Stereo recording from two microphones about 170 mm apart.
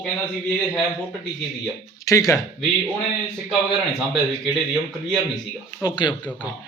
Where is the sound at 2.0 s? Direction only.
20° left (ahead or behind).